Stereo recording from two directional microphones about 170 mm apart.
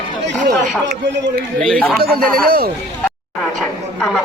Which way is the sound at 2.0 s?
60° right (ahead or behind).